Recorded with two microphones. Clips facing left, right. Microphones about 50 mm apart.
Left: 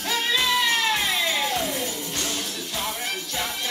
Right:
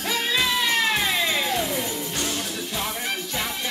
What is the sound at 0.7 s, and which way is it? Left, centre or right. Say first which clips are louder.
Music: right 1 dB; centre.